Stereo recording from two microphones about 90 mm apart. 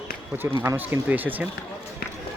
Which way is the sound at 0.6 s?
25° right (ahead or behind).